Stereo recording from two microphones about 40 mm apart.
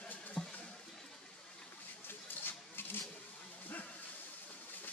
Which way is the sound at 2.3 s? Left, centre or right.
Left.